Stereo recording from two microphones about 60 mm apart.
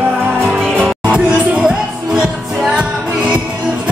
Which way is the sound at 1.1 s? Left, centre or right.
Centre.